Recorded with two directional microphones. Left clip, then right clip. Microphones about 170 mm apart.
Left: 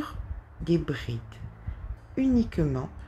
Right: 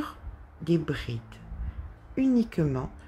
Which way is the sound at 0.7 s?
5° right (ahead or behind).